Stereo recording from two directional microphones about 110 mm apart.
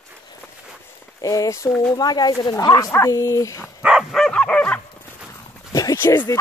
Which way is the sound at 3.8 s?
5° right (ahead or behind).